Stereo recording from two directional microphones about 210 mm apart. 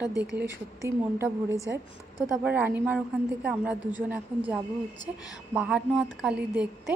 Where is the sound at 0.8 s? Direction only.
15° right (ahead or behind).